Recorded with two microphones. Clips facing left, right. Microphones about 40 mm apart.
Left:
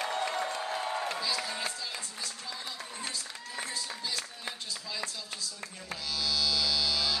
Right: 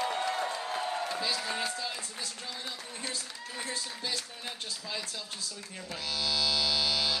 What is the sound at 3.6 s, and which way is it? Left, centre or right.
Speech, right.